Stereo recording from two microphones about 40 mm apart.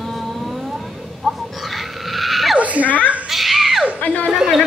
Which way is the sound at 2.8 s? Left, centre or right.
Left.